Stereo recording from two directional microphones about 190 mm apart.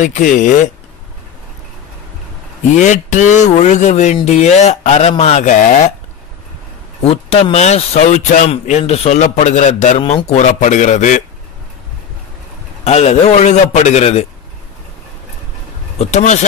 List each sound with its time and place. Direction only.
0.0 s speech: 40° left (ahead or behind)
2.8 s speech: 40° left (ahead or behind)
7.0 s speech: 35° left (ahead or behind)
12.8 s speech: 35° left (ahead or behind)
16.0 s speech: 40° left (ahead or behind)